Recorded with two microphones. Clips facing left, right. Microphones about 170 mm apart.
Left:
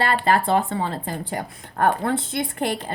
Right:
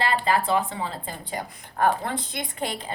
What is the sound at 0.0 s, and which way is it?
Speech, 55° left (ahead or behind).